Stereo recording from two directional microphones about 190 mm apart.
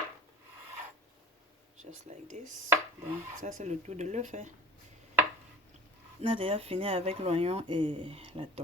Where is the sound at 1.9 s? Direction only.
35° right (ahead or behind).